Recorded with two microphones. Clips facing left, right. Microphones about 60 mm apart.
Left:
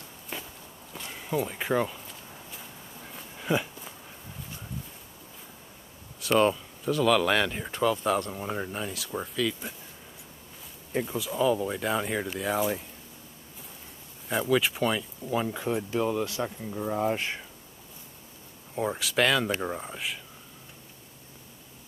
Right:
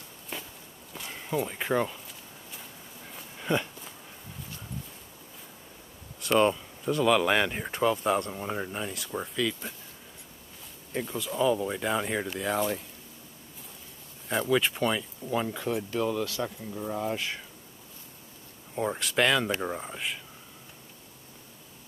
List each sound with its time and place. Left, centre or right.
0.3 s walk: centre
0.9 s speech: centre
3.1 s a sound: centre
6.2 s speech: centre
10.9 s speech: centre
14.3 s speech: centre; by 17.4 s left
18.8 s speech: centre